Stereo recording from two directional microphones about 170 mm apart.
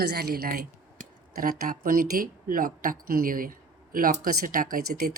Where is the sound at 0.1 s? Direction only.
65° right (ahead or behind).